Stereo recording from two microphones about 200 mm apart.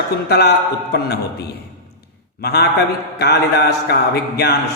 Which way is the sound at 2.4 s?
50° left (ahead or behind).